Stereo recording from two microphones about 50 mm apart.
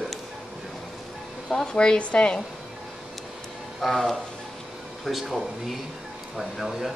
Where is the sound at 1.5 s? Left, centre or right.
Centre.